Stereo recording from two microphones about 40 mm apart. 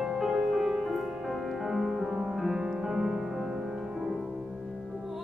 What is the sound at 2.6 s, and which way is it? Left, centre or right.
Music, centre.